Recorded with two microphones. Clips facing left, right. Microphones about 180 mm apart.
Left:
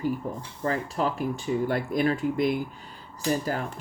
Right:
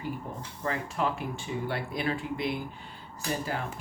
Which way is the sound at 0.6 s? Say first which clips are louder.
Left 4 dB; 35° left (ahead or behind).